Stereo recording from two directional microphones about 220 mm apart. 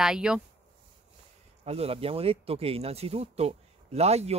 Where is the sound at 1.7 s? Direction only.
25° right (ahead or behind).